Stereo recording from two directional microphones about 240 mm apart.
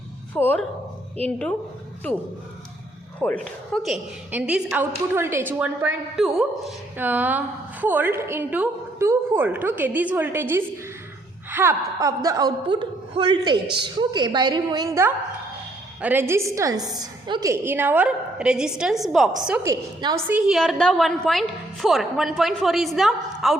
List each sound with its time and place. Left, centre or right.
0.3 s speech: centre
3.2 s a woman's voice: centre